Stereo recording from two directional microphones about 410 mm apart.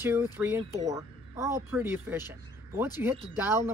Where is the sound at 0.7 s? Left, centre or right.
Centre.